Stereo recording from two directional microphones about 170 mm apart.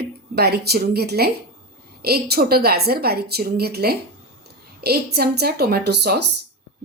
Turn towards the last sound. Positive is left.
turn(degrees=-75)  # may be behind; listen again after turning